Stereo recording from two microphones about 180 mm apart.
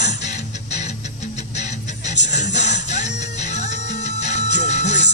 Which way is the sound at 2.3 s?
40° left (ahead or behind).